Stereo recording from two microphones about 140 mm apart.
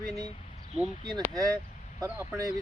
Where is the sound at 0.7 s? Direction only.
5° right (ahead or behind).